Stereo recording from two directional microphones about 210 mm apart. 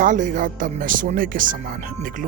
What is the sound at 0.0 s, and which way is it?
Speech, 40° right (ahead or behind).